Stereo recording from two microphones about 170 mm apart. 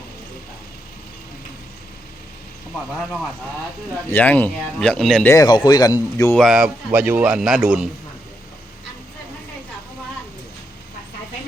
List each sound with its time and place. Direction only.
2.9 s a man's voice: centre (ahead or behind)
4.1 s speech: 10° left (ahead or behind)
5.3 s speech: 25° left (ahead or behind)
6.3 s a man's voice: centre (ahead or behind)